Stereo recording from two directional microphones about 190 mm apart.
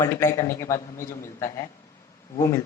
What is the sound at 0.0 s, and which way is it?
A man's voice, 15° left (ahead or behind).